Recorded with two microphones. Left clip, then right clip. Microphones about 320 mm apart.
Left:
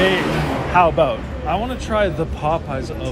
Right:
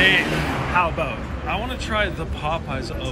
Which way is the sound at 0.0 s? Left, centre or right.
Left.